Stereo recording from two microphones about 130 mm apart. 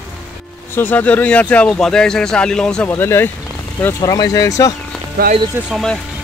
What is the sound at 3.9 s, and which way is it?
Speech, 30° left (ahead or behind).